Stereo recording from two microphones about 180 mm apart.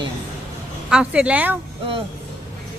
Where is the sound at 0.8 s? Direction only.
5° right (ahead or behind).